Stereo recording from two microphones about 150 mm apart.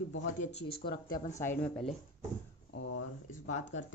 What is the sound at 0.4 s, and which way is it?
Speech, 45° left (ahead or behind).